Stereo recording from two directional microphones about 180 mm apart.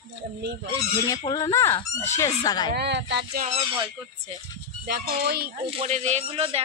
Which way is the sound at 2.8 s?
75° right (ahead or behind).